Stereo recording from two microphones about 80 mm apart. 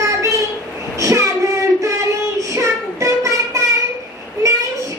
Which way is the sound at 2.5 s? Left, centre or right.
Right.